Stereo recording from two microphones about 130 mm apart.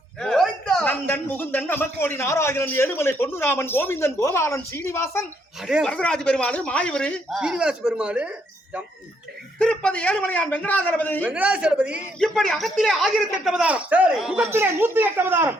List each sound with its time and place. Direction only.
0.2 s a man's voice: 5° left (ahead or behind); by 5.2 s 20° left (ahead or behind)
5.8 s a man's voice: 10° left (ahead or behind)
7.3 s speech: 5° right (ahead or behind)
9.6 s a man's voice: 10° left (ahead or behind)
11.2 s speech: 10° right (ahead or behind)
12.2 s speech: 5° left (ahead or behind)
14.5 s speech: 15° right (ahead or behind)